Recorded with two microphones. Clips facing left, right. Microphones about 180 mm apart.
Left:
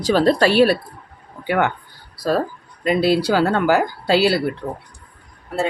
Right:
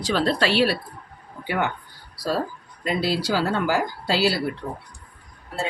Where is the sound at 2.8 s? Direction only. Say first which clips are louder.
Left 7 dB; 60° left (ahead or behind).